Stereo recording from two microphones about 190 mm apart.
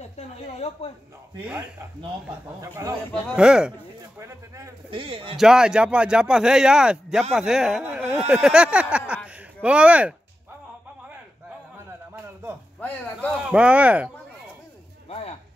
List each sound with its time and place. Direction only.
0.0 s a sound: 35° left (ahead or behind)
2.6 s speech: 15° right (ahead or behind)
3.1 s speech: centre (ahead or behind)
4.2 s speech: 15° right (ahead or behind)
4.9 s a man's voice: 30° right (ahead or behind)
5.3 s speech: 5° right (ahead or behind)
9.3 s a sound: 5° right (ahead or behind)
13.5 s speech: 5° right (ahead or behind)
15.0 s a sound: 35° left (ahead or behind)